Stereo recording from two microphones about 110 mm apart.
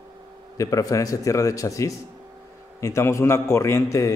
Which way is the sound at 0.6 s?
30° left (ahead or behind).